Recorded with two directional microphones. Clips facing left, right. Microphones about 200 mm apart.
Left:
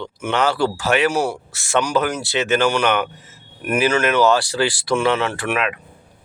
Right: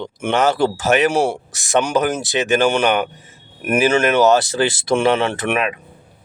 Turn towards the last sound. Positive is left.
turn(degrees=-25)  # may be behind; listen again after turning